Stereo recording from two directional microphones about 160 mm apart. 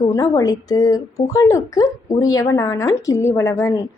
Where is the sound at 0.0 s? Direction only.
20° left (ahead or behind).